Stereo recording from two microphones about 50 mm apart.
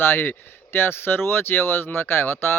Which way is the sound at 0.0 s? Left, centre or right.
Left.